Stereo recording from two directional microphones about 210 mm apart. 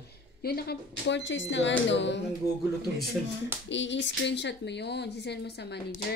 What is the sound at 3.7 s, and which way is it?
Speech, 60° left (ahead or behind).